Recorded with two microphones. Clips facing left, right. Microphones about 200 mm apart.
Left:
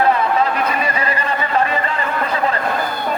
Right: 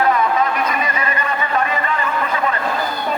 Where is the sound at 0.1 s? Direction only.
30° left (ahead or behind).